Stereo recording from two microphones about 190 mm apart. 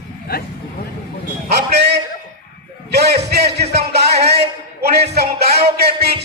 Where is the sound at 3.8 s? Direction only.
60° right (ahead or behind).